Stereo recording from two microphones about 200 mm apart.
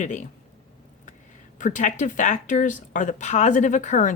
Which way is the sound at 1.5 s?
40° left (ahead or behind).